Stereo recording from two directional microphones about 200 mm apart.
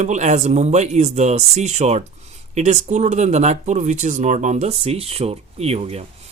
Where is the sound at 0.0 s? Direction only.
35° right (ahead or behind).